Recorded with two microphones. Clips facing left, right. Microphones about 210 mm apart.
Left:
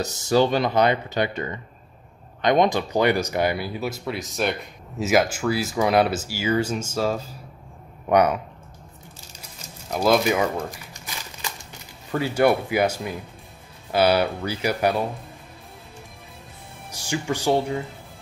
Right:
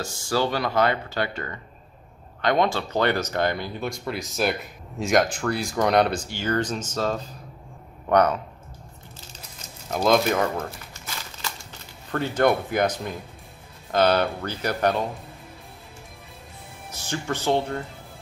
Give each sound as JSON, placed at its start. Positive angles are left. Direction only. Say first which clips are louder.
{"t": 0.0, "sound": "speech", "louder": "left 5 dB", "side_deg": 20}
{"t": 9.9, "sound": "crumpling", "louder": "left 1 dB", "side_deg": 5}
{"t": 12.1, "sound": "speech", "louder": "left 2 dB", "side_deg": 10}
{"t": 16.9, "sound": "speech", "louder": "left 3 dB", "side_deg": 15}